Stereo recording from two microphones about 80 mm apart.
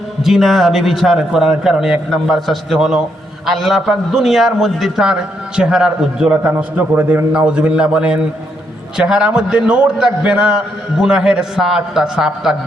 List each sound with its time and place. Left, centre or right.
0.2 s a man's voice: centre
6.6 s a man's voice: right
7.3 s a man's voice: centre